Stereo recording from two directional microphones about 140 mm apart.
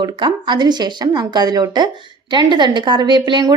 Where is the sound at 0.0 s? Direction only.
35° right (ahead or behind).